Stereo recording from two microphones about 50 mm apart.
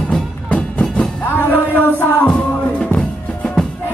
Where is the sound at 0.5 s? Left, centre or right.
Left.